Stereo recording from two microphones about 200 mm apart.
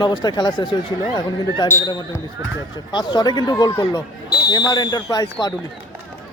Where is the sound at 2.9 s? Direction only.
20° left (ahead or behind).